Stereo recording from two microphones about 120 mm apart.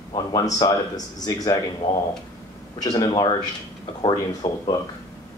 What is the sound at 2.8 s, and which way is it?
Speech, 35° left (ahead or behind).